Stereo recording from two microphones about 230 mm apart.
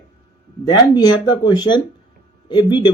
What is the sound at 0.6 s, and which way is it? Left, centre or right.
Speech, centre.